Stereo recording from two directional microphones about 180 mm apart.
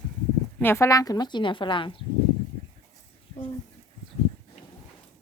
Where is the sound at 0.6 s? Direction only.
15° left (ahead or behind).